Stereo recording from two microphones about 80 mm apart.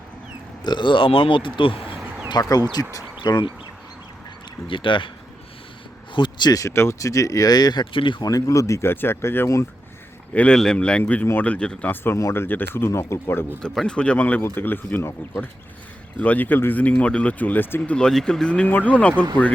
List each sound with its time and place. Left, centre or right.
0.6 s speech: left
2.4 s speech: left
3.2 s speech: left
4.7 s speech: left
6.1 s speech: left
6.5 s speech: left
8.2 s speech: left
10.3 s speech: centre
12.1 s speech: left
13.6 s speech: centre; by 15.4 s left
16.1 s speech: centre
16.9 s speech: centre
17.9 s speech: centre